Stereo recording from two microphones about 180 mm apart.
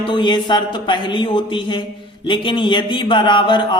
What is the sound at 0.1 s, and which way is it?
Speech, 25° left (ahead or behind).